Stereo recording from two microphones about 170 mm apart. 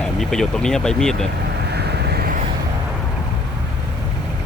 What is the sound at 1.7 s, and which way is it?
Vehicle, 70° right (ahead or behind).